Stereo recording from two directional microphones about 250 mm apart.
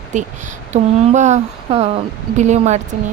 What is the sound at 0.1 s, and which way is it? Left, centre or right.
Speech, right.